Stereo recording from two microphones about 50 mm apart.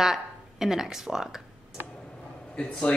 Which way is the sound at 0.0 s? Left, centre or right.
Centre.